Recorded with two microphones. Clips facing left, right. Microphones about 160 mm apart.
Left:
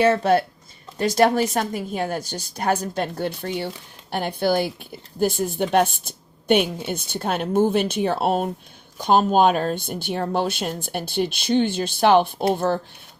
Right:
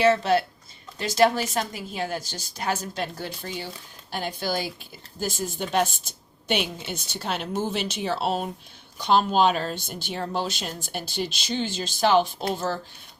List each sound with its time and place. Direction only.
0.0 s a woman's voice: 50° left (ahead or behind)